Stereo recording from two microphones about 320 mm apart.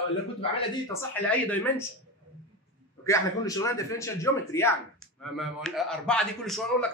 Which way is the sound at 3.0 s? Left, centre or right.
Centre.